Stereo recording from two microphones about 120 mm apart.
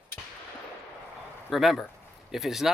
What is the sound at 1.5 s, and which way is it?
Speech, centre (ahead or behind).